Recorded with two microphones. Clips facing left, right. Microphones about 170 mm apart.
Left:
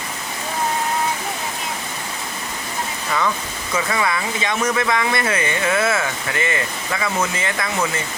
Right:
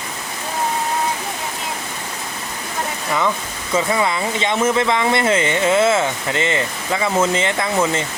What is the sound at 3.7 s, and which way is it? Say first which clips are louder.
Speech: right 3 dB; 25° right (ahead or behind).